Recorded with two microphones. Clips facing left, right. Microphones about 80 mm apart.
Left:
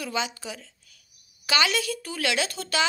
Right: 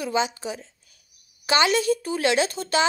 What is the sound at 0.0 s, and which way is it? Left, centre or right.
Speech, right.